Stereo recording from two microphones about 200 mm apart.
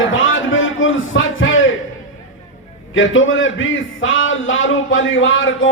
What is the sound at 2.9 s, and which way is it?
A man's voice, 75° left (ahead or behind).